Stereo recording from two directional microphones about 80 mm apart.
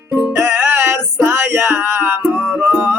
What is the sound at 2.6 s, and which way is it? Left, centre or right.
Music, right.